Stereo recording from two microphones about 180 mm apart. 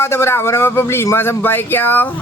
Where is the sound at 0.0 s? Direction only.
15° left (ahead or behind).